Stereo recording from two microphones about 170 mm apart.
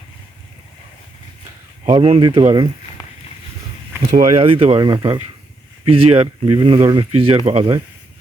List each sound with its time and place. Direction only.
1.9 s speech: 30° right (ahead or behind)
4.1 s speech: 45° right (ahead or behind)